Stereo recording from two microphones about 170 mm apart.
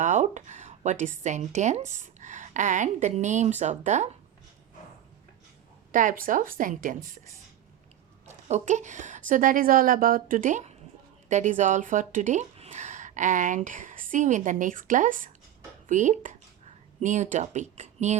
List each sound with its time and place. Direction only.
0.0 s a woman's voice: 45° right (ahead or behind)
5.9 s speech: 50° right (ahead or behind)
8.3 s speech: 40° right (ahead or behind)